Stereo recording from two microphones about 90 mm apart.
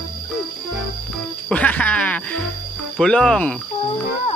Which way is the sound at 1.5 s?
15° left (ahead or behind).